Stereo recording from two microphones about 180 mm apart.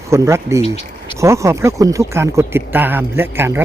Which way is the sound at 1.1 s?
15° right (ahead or behind).